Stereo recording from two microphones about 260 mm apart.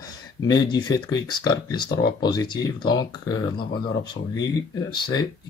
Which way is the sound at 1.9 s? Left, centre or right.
Left.